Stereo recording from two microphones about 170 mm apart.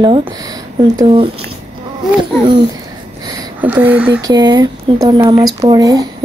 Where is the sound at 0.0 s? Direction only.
30° right (ahead or behind).